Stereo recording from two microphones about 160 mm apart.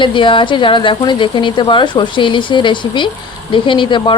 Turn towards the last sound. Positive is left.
turn(degrees=30)  # may be behind; listen again after turning